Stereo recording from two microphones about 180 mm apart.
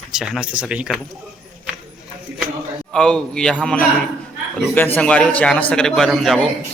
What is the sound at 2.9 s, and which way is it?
A man's voice, 5° left (ahead or behind).